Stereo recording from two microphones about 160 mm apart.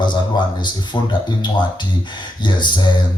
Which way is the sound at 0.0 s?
30° left (ahead or behind).